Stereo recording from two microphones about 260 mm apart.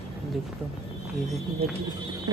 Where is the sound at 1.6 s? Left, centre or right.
Right.